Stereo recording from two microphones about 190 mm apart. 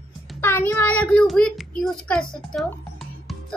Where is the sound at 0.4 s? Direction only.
10° left (ahead or behind).